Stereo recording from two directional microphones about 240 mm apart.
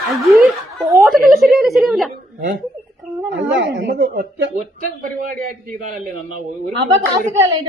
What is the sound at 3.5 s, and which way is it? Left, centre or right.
A woman's voice, right.